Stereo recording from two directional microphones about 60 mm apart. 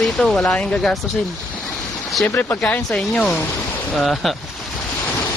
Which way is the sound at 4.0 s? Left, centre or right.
Centre.